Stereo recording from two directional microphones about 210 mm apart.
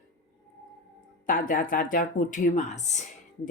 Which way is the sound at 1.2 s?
40° left (ahead or behind).